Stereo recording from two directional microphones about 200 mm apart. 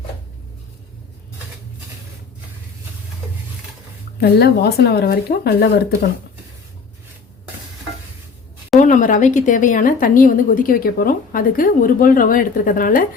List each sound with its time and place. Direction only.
4.2 s speech: 55° left (ahead or behind)
8.8 s speech: 40° left (ahead or behind)